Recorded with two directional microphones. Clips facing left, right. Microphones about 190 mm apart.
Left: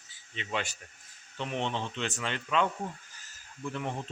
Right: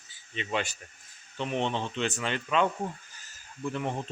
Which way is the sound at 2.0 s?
5° right (ahead or behind).